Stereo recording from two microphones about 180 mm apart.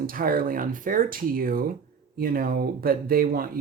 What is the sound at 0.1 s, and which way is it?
Speech, 50° right (ahead or behind).